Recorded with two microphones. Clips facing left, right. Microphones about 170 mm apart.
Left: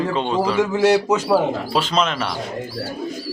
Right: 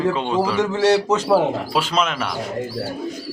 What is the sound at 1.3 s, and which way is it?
Speech, 10° right (ahead or behind).